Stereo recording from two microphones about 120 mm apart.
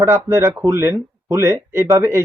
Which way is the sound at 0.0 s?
20° right (ahead or behind).